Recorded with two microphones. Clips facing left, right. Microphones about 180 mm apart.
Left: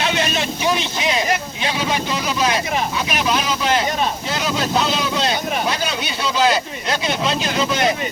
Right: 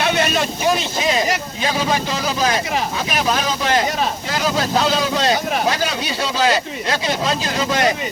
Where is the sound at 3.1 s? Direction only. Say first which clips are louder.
Right 2 dB; 40° right (ahead or behind).